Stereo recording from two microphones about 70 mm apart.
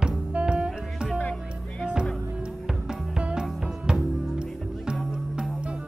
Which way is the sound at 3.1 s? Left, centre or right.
Centre.